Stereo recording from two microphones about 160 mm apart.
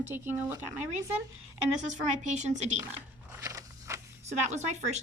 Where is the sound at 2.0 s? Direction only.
45° right (ahead or behind).